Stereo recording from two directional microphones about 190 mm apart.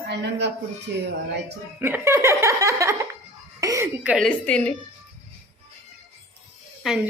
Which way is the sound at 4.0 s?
5° right (ahead or behind).